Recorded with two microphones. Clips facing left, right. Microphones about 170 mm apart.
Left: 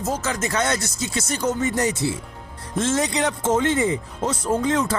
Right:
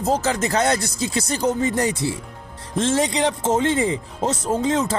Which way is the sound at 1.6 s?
30° right (ahead or behind).